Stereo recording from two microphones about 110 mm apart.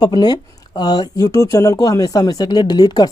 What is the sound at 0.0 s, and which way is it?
Speech, 40° left (ahead or behind).